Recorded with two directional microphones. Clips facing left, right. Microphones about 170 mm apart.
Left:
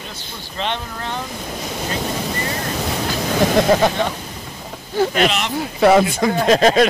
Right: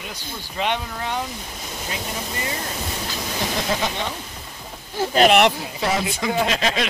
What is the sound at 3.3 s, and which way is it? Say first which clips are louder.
Speech: left 10 dB; 60° left (ahead or behind).